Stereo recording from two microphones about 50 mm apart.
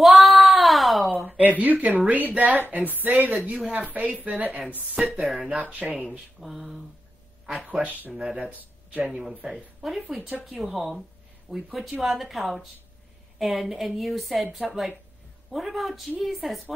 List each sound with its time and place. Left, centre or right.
0.0 s a sound: centre
1.4 s speech: right
5.2 s a woman's voice: centre
5.5 s speech: right
6.4 s a woman's voice: centre
7.6 s speech: right
9.4 s speech: centre
9.8 s a woman's voice: centre